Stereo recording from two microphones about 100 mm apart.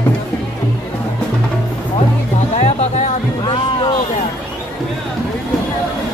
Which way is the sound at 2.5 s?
90° left.